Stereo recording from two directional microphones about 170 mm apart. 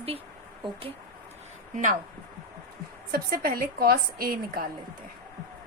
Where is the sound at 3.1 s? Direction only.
60° right (ahead or behind).